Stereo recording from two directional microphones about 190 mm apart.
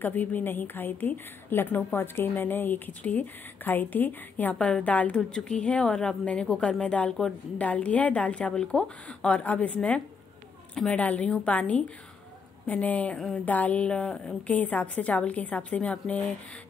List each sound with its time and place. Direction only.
0.0 s a woman's voice: 10° left (ahead or behind)